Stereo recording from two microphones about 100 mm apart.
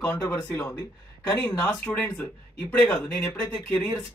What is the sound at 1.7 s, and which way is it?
Speech, 15° left (ahead or behind).